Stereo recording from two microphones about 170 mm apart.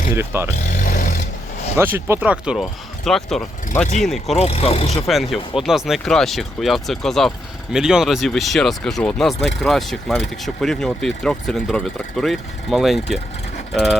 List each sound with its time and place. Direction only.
0.1 s speech: 15° right (ahead or behind)
0.7 s vehicle: 55° left (ahead or behind)
1.8 s speech: 10° right (ahead or behind)
4.4 s speech: 35° left (ahead or behind)
5.0 s speech: centre (ahead or behind)